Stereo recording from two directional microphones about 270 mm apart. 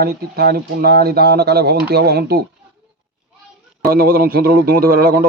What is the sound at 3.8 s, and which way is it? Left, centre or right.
Speech, right.